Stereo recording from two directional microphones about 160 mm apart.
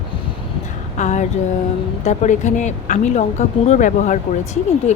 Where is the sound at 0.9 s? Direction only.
50° left (ahead or behind).